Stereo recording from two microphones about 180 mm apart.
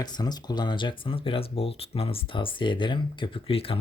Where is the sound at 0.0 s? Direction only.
20° left (ahead or behind).